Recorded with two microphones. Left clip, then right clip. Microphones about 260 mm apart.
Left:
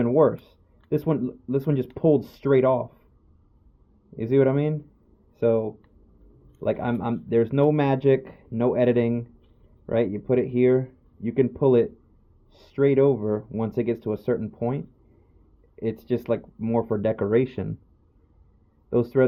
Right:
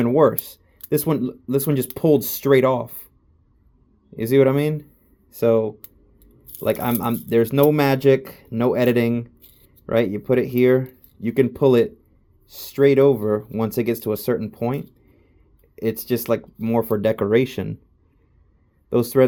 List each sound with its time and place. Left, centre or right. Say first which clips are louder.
0.0 s speech: right 3 dB; right
4.1 s speech: right 4 dB; right
18.9 s speech: right 4 dB; right